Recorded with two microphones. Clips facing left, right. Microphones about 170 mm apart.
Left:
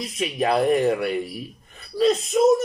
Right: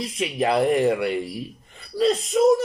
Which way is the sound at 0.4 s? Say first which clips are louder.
Even; 25° right (ahead or behind).